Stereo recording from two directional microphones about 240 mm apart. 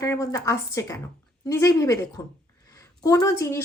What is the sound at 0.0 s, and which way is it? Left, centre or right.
A woman's voice, centre.